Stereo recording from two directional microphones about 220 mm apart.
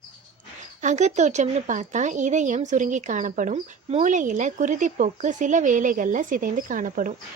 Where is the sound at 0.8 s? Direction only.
35° right (ahead or behind).